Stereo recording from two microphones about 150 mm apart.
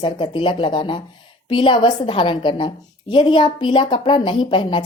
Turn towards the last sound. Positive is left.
turn(degrees=35)  # may be behind; listen again after turning